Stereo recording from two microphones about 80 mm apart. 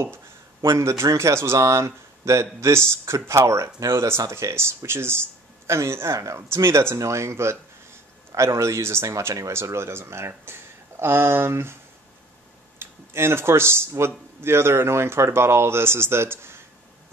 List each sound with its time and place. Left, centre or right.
0.6 s speech: right
12.7 s speech: right